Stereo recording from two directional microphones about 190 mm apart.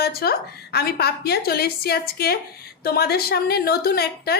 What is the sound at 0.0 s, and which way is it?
A woman's voice, 55° left (ahead or behind).